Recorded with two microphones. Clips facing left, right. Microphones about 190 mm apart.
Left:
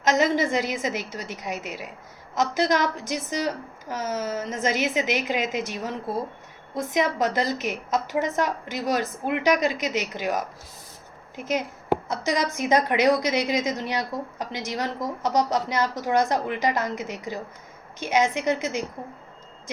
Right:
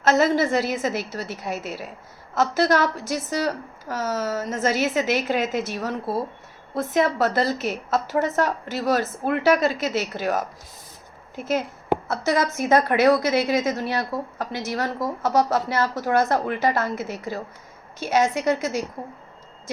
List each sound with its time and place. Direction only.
0.0 s a woman's voice: 15° left (ahead or behind)